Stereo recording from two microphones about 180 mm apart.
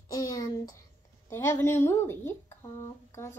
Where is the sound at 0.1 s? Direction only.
20° left (ahead or behind).